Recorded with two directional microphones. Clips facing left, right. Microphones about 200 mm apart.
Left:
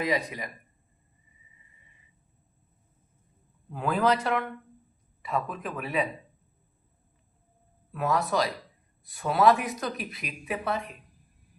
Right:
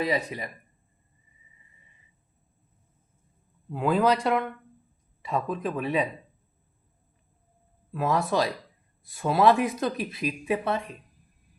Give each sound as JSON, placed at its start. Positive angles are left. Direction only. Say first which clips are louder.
{"t": 0.0, "sound": "speech", "louder": "right 1 dB", "side_deg": -30}
{"t": 3.7, "sound": "speech", "louder": "right 2 dB", "side_deg": -25}
{"t": 5.2, "sound": "speech", "louder": "right 3 dB", "side_deg": -30}
{"t": 7.9, "sound": "speech", "louder": "right 2 dB", "side_deg": -25}